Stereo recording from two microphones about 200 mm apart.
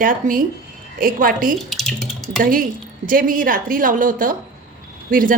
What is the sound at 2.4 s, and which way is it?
A woman's voice, 45° right (ahead or behind).